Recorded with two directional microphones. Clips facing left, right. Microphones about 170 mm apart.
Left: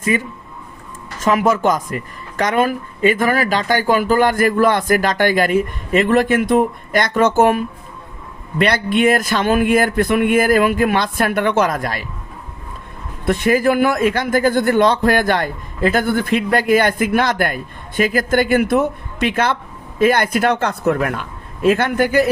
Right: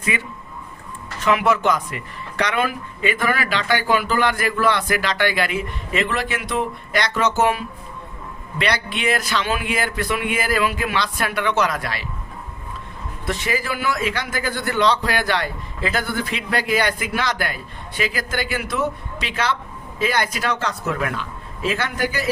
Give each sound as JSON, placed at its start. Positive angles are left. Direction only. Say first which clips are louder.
{"t": 0.1, "sound": "speech", "louder": "left 7 dB", "side_deg": 40}
{"t": 13.2, "sound": "speech", "louder": "left 10 dB", "side_deg": 55}